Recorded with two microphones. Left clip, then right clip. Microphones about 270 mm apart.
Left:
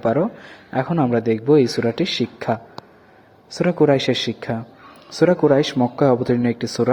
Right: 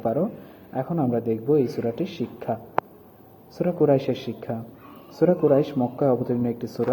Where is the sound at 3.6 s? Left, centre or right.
Left.